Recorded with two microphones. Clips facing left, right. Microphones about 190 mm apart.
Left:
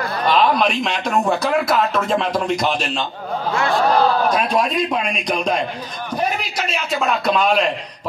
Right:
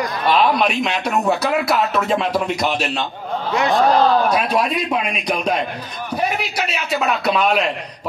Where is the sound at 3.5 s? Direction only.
20° right (ahead or behind).